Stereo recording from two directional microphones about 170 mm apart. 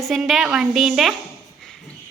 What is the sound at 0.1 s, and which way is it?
A woman's voice, centre (ahead or behind).